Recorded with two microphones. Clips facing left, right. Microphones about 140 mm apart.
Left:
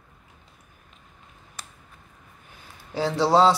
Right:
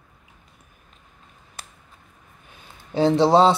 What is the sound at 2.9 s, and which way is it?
Speech, 20° right (ahead or behind).